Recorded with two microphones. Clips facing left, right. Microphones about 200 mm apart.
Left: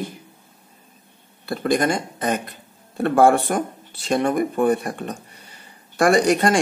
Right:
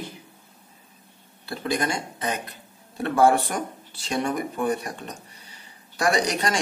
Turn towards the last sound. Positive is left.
turn(degrees=50)  # may be behind; listen again after turning